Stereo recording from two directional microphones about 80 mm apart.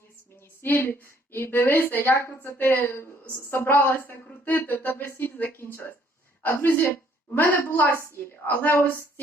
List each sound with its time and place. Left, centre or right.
0.6 s a woman's voice: left